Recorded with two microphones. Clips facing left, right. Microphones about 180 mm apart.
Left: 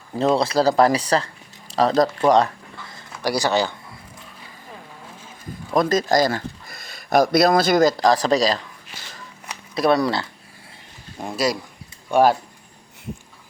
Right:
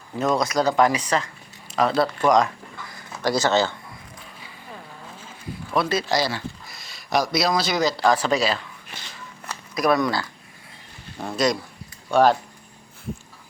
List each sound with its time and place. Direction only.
0.2 s speech: 30° left (ahead or behind)
2.9 s speech: 15° left (ahead or behind)
5.7 s speech: 45° left (ahead or behind)
8.0 s speech: 35° left (ahead or behind)
9.7 s speech: 30° left (ahead or behind)
11.2 s speech: 10° left (ahead or behind)